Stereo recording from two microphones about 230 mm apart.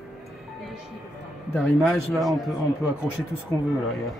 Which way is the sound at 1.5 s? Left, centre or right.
Centre.